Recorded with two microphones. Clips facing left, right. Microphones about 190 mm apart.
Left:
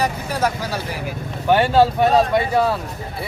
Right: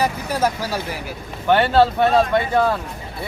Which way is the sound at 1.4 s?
10° left (ahead or behind).